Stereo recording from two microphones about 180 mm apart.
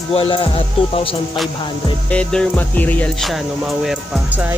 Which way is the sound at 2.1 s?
5° left (ahead or behind).